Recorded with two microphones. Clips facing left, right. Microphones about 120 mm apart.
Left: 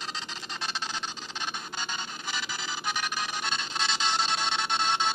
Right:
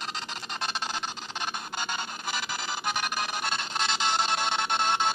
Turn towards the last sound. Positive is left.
turn(degrees=-50)  # may be behind; listen again after turning